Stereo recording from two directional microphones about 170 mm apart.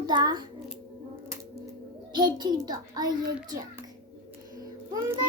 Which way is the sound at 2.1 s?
25° right (ahead or behind).